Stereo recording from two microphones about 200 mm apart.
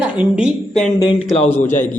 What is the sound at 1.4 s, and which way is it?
Speech, 10° left (ahead or behind).